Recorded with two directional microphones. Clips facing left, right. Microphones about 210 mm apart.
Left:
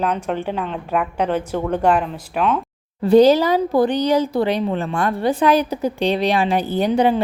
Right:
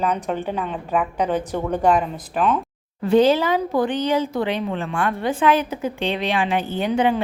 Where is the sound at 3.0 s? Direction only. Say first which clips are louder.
Left 4 dB; 35° left (ahead or behind).